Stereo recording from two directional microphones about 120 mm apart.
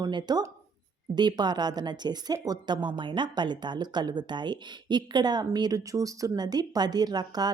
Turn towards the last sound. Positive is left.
turn(degrees=-35)  # may be behind; listen again after turning